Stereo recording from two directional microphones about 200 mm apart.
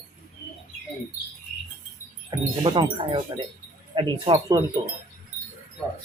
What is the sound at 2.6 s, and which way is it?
Speech, 25° right (ahead or behind).